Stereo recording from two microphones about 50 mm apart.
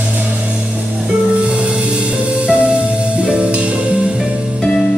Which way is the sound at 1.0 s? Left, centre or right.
Right.